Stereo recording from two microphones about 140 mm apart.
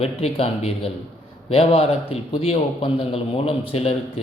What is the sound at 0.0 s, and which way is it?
A man's voice, 45° left (ahead or behind).